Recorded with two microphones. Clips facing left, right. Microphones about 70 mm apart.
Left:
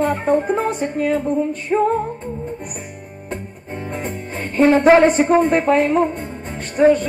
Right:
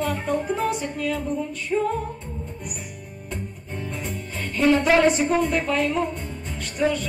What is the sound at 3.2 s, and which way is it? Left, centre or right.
Music, left.